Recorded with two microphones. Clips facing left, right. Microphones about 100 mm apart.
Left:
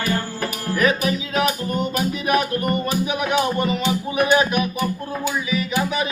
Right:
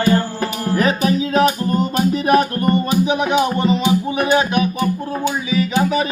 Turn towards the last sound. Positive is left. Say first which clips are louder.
# right 5 dB
turn(degrees=-35)  # may be behind; listen again after turning